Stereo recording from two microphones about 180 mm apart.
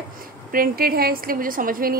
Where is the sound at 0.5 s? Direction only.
55° right (ahead or behind).